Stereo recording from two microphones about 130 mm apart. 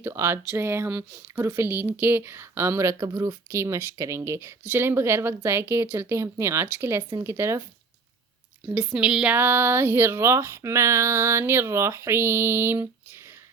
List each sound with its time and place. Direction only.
0.0 s speech: 20° right (ahead or behind)
8.6 s speech: 10° right (ahead or behind)